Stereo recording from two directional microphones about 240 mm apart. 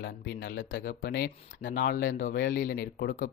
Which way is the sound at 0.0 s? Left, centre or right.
Left.